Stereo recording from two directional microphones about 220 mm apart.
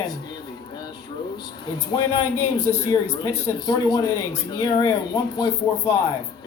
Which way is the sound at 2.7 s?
10° left (ahead or behind).